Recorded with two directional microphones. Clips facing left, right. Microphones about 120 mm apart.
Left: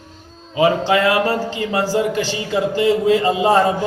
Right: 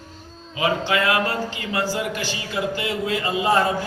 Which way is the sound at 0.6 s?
35° left (ahead or behind).